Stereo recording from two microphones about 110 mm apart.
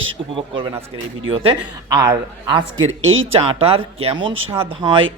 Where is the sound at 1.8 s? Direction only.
35° right (ahead or behind).